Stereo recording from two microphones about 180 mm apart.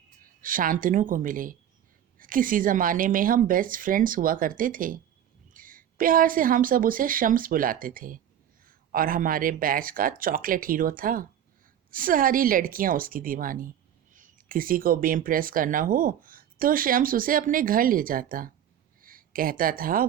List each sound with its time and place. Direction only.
0.2 s a woman's voice: 50° right (ahead or behind)